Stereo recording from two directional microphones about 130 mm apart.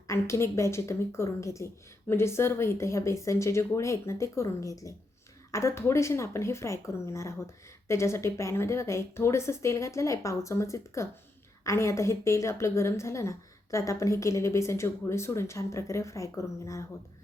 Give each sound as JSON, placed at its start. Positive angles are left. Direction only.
{"t": 0.1, "sound": "a woman's voice", "side_deg": 20}